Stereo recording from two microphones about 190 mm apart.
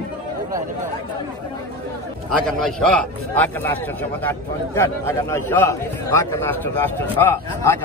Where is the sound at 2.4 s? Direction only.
5° left (ahead or behind).